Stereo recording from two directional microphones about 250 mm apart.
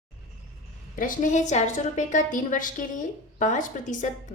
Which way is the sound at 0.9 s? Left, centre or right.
Left.